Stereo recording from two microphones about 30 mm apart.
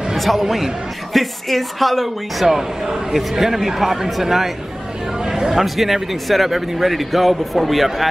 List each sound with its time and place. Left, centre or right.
0.3 s speech: centre
2.4 s a man's voice: centre
5.2 s speech: right
5.5 s speech: centre